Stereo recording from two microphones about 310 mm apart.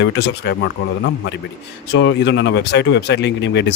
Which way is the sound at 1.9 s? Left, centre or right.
Left.